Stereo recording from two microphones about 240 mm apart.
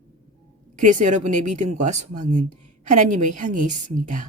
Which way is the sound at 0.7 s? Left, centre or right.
Right.